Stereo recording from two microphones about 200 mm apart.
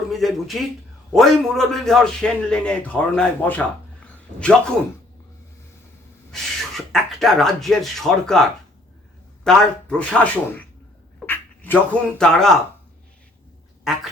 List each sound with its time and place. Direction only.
0.1 s a man's voice: centre (ahead or behind)
4.0 s a sound: 5° left (ahead or behind)
6.3 s speech: centre (ahead or behind)